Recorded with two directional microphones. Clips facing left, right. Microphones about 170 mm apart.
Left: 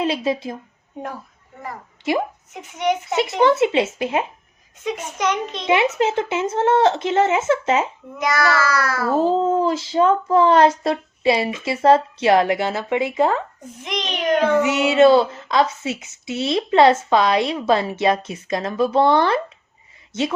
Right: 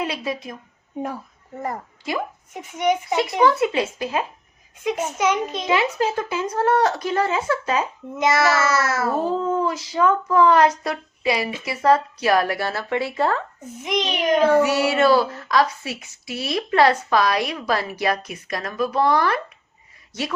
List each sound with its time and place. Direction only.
0.0 s a child's voice: 25° left (ahead or behind)
1.5 s a woman's voice: 40° right (ahead or behind)
2.6 s a child's voice: 10° right (ahead or behind)
3.2 s a child's voice: 25° left (ahead or behind)
4.8 s a child's voice: 10° right (ahead or behind)
5.6 s a child's voice: 25° left (ahead or behind)
8.1 s a child's voice: 25° right (ahead or behind)
9.1 s a child's voice: 25° left (ahead or behind)
13.6 s a child's voice: 10° right (ahead or behind)
14.5 s a child's voice: 20° left (ahead or behind)